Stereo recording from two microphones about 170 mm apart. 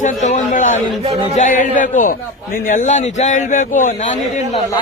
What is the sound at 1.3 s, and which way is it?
A man's voice, 50° left (ahead or behind).